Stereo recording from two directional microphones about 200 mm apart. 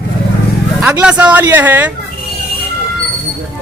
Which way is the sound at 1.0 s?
5° right (ahead or behind).